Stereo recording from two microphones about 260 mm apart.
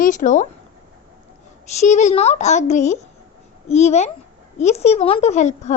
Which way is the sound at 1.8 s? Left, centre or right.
Left.